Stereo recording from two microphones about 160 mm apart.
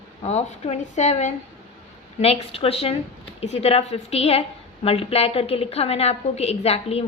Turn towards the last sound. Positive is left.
turn(degrees=40)  # may be behind; listen again after turning